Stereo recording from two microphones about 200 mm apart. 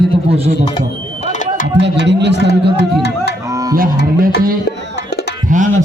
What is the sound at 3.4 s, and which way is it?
Music, 15° right (ahead or behind).